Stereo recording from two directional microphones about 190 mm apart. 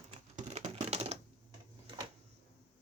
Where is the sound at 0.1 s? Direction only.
35° right (ahead or behind).